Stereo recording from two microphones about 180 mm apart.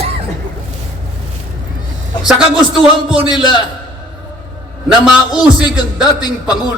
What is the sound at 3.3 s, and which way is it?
Speech, 25° left (ahead or behind).